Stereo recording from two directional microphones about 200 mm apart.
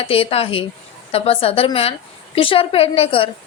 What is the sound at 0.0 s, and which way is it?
Speech, 30° left (ahead or behind).